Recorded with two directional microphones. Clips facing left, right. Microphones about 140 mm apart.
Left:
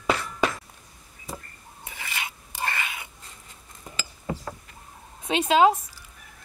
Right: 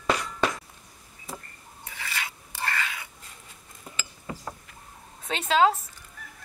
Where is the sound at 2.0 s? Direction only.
20° left (ahead or behind).